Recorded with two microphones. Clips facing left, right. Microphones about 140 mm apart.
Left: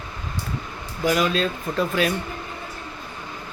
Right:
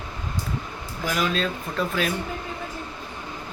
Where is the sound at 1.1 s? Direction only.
Centre (ahead or behind).